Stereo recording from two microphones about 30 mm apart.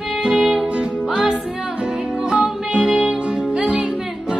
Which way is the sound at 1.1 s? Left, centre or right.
Right.